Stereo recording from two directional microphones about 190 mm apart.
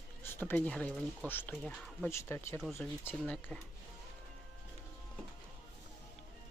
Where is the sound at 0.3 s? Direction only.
10° left (ahead or behind).